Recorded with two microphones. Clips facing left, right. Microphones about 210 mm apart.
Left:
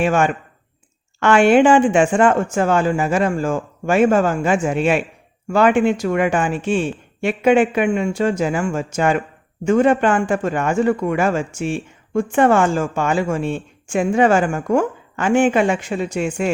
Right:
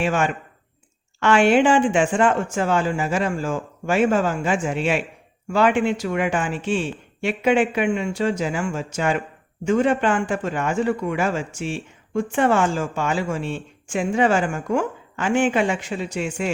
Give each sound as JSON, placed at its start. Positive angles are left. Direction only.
{"t": 0.0, "sound": "a man's voice", "side_deg": 50}